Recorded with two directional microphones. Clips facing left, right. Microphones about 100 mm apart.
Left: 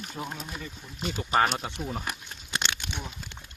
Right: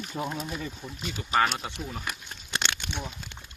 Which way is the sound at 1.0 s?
45° left (ahead or behind).